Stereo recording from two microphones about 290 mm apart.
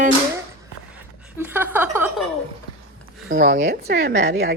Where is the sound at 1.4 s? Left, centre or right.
Centre.